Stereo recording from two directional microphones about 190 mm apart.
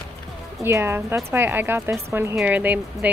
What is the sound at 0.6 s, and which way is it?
Speech, 10° right (ahead or behind).